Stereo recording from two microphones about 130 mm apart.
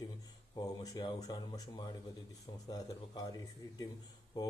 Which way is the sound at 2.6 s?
30° left (ahead or behind).